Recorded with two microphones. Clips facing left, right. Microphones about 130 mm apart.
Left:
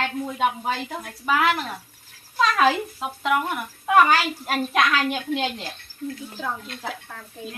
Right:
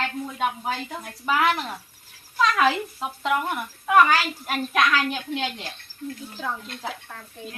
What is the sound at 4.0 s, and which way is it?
Speech, 20° left (ahead or behind).